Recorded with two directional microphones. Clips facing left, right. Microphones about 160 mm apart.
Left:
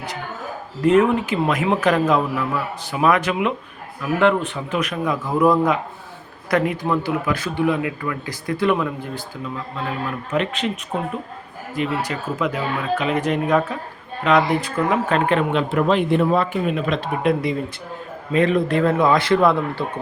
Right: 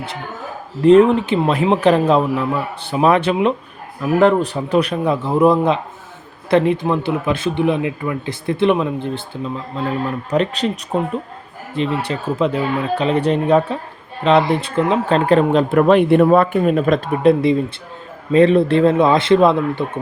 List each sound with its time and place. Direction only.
0.8 s speech: 30° right (ahead or behind)
15.3 s speech: 35° right (ahead or behind)
15.9 s speech: 60° right (ahead or behind)
17.2 s speech: 25° right (ahead or behind)